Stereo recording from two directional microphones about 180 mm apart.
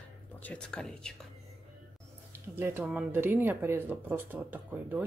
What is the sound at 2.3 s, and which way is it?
Speech, 15° right (ahead or behind).